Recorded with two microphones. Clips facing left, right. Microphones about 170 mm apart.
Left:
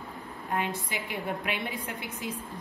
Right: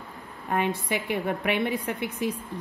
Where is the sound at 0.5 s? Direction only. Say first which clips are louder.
Right 6 dB; 60° right (ahead or behind).